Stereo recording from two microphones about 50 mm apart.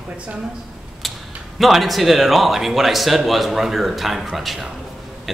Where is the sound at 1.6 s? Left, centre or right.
Centre.